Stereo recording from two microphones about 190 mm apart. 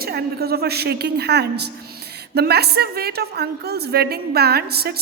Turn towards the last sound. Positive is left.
turn(degrees=-55)  # may be behind; listen again after turning